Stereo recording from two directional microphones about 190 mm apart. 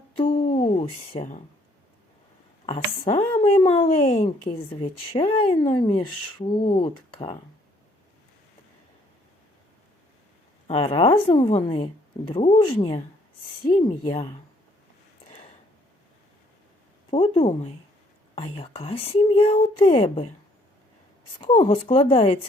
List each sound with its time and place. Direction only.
0.2 s a sound: 30° left (ahead or behind)
2.6 s speech: 30° left (ahead or behind)
10.7 s speech: 30° left (ahead or behind)
15.3 s a sound: 30° left (ahead or behind)
17.1 s speech: 30° left (ahead or behind)
21.3 s speech: 25° left (ahead or behind)